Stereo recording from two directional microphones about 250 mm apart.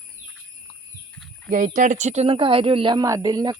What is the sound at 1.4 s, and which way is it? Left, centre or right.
Speech, right.